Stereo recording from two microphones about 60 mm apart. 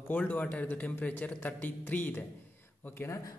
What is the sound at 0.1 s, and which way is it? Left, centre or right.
Speech, left.